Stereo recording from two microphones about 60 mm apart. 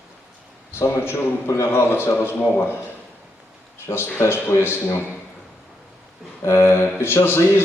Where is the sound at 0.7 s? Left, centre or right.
Left.